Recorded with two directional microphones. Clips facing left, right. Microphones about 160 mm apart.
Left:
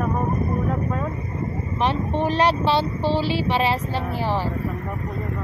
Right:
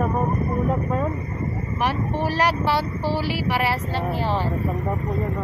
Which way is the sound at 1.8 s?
20° left (ahead or behind).